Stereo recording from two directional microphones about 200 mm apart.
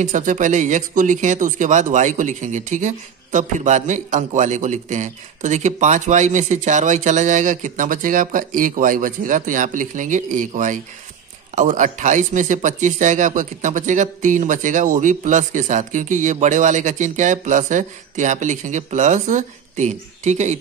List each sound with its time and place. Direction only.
0.0 s speech: 40° right (ahead or behind)